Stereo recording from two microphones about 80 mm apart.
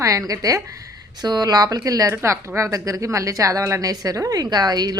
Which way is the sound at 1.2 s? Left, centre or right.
Right.